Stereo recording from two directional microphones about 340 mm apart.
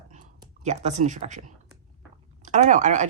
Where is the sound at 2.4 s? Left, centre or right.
Right.